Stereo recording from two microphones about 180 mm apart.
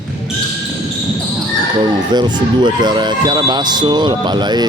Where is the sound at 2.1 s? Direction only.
25° right (ahead or behind).